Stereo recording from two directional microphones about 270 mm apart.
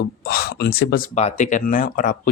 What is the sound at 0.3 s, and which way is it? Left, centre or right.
Speech, left.